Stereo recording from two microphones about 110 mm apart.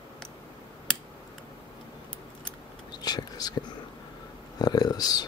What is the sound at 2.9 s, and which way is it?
Whispering, 35° left (ahead or behind).